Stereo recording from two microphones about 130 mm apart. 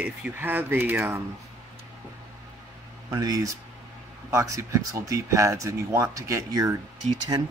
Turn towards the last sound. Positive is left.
turn(degrees=-35)  # may be behind; listen again after turning